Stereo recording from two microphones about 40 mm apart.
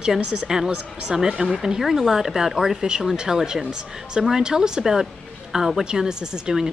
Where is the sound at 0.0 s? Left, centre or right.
Right.